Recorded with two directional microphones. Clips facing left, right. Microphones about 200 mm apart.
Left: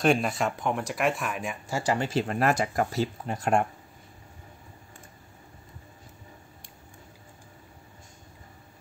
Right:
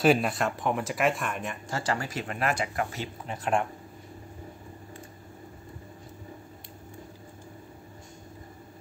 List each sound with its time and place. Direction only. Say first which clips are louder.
0.0 s speech: right 1 dB; centre (ahead or behind); by 2.0 s 15° left (ahead or behind)
2.0 s speech: left 5 dB; 35° left (ahead or behind)